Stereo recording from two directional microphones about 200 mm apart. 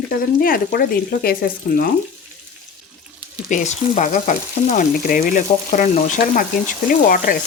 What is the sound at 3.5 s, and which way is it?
Frying, 40° left (ahead or behind).